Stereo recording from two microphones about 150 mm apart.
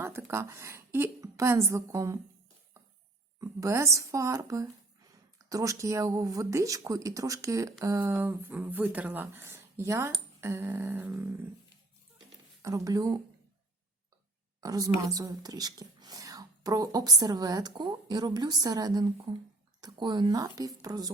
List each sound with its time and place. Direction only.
0.0 s a woman's voice: 15° right (ahead or behind)
3.4 s a woman's voice: 20° right (ahead or behind)
12.6 s speech: 20° right (ahead or behind)
14.6 s speech: 25° right (ahead or behind)